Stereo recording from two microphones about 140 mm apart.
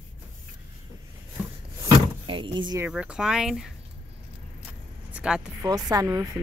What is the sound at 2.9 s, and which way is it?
Speech, 5° right (ahead or behind).